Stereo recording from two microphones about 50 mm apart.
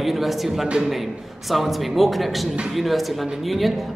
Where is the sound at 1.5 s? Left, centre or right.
Centre.